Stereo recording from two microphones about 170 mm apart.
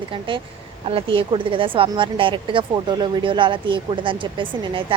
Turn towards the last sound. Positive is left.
turn(degrees=-30)  # may be behind; listen again after turning